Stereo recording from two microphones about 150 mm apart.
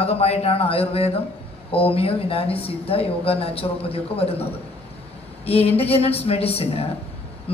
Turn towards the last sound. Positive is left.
turn(degrees=40)  # may be behind; listen again after turning